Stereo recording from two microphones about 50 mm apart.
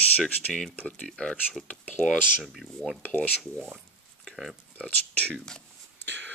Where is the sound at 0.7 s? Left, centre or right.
Left.